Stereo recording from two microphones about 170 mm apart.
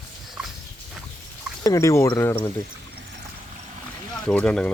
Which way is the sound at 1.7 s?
20° left (ahead or behind).